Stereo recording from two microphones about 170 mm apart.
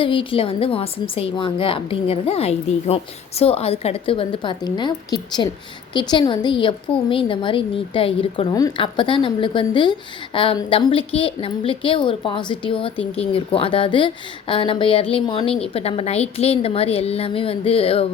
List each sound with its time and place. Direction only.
0.0 s a woman's voice: 30° left (ahead or behind)